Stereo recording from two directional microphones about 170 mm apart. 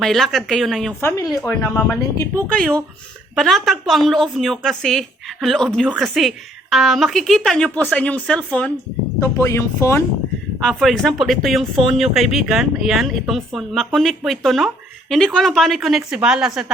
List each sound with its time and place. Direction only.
0.0 s speech: centre (ahead or behind)
1.0 s speech: 20° left (ahead or behind)
1.3 s speech: centre (ahead or behind)
9.2 s speech: 15° left (ahead or behind)
10.6 s speech: 5° left (ahead or behind)